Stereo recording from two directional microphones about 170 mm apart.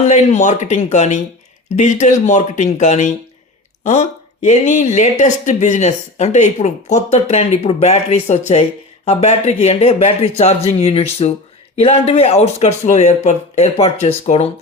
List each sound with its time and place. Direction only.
0.1 s speech: 45° left (ahead or behind)